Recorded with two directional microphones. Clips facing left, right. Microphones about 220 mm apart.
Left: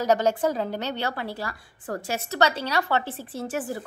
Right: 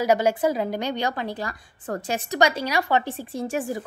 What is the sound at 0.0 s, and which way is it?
A woman's voice, 10° right (ahead or behind).